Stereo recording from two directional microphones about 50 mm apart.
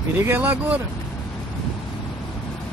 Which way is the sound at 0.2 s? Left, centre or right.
Right.